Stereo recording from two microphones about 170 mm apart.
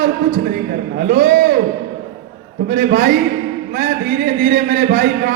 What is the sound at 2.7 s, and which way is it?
A man's voice, 65° right (ahead or behind).